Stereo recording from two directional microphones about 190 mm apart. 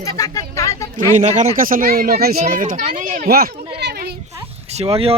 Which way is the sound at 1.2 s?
35° right (ahead or behind).